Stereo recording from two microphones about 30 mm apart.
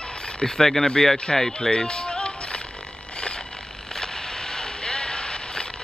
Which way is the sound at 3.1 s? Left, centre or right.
Left.